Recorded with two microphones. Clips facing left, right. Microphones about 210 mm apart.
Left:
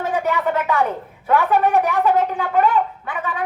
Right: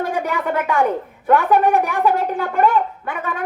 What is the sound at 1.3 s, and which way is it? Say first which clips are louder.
Speech: right 2 dB; 50° right (ahead or behind).